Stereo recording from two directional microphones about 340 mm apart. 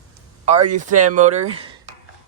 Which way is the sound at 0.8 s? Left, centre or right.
Right.